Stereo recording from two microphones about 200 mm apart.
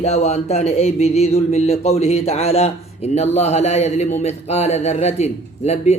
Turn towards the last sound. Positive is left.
turn(degrees=35)  # may be behind; listen again after turning